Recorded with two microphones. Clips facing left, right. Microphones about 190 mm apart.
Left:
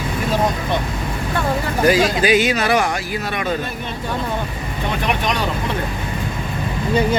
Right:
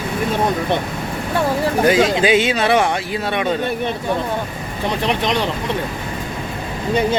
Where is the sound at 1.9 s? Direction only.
25° right (ahead or behind).